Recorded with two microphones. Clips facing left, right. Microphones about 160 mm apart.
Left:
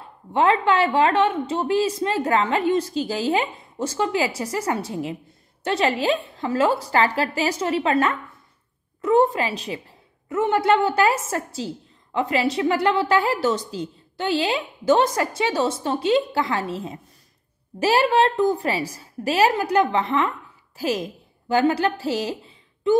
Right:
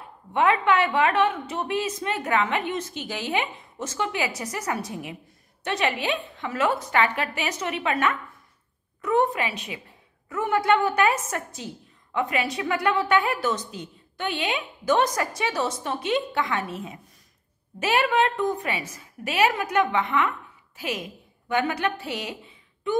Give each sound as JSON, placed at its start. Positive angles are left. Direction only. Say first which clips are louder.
{"t": 0.3, "sound": "a woman's voice", "louder": "left 2 dB", "side_deg": 30}